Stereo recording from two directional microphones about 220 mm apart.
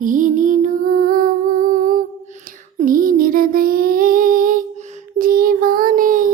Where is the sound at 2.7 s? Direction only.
40° right (ahead or behind).